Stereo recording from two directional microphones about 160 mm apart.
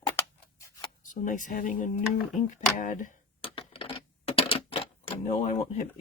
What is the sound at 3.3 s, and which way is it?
Typewriter, 35° left (ahead or behind).